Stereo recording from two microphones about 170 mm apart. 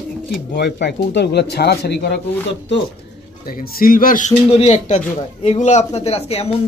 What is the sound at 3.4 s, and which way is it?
Speech, 60° left (ahead or behind).